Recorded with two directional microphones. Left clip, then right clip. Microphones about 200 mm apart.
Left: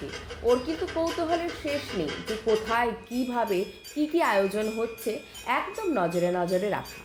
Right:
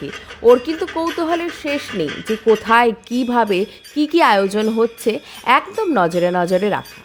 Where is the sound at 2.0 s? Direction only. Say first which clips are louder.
Right 15 dB; 35° right (ahead or behind).